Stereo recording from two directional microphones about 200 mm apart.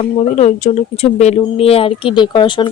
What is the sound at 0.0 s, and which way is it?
Speech, 30° left (ahead or behind).